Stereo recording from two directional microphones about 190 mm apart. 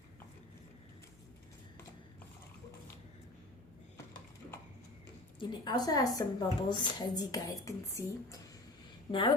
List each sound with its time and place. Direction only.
5.4 s speech: 25° left (ahead or behind)